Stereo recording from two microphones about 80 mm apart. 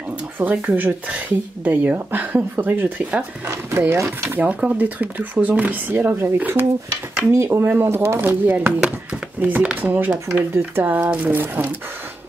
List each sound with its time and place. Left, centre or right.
0.4 s speech: right
3.9 s speech: right
4.4 s speech: centre